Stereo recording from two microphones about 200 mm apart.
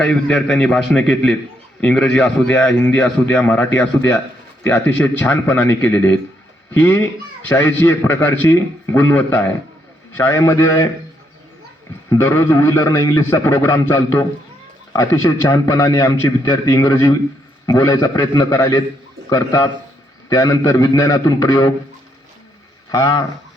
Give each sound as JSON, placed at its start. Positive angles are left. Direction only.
{"t": 0.0, "sound": "a man's voice", "side_deg": 5}
{"t": 12.0, "sound": "a man's voice", "side_deg": 15}
{"t": 22.9, "sound": "speech", "side_deg": 20}